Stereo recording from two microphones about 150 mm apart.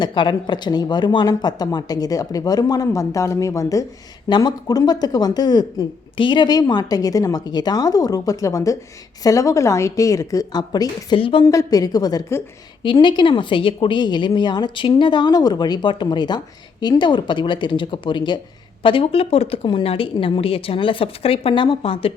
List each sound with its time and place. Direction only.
0.0 s speech: 30° left (ahead or behind)
11.4 s speech: 25° left (ahead or behind); by 22.1 s 40° left (ahead or behind)